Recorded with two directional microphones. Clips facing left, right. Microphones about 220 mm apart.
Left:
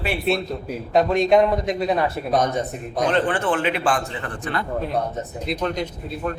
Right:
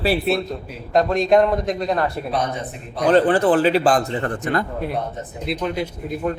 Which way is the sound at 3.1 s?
35° right (ahead or behind).